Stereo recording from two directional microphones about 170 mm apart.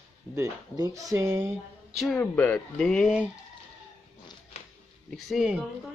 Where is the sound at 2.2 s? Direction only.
10° left (ahead or behind).